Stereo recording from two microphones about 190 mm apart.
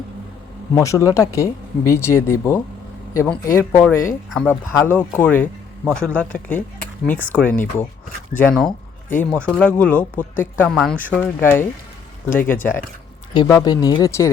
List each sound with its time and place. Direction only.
0.7 s speech: 15° left (ahead or behind)
13.3 s speech: 25° left (ahead or behind)